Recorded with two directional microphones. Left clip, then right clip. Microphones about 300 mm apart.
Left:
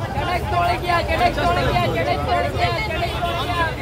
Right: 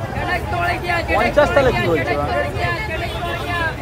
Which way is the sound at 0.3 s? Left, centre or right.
Left.